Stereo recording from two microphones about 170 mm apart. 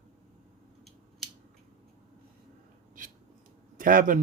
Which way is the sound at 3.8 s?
55° right (ahead or behind).